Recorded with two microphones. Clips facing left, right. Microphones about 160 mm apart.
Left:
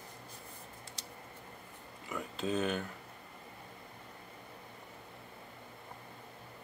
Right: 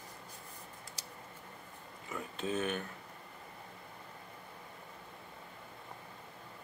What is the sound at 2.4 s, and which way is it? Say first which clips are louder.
Speech: left 2 dB; 35° left (ahead or behind).